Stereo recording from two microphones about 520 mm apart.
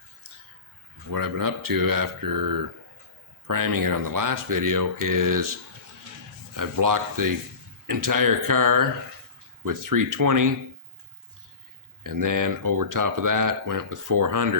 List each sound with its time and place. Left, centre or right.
1.1 s speech: right
6.6 s speech: right
12.0 s speech: right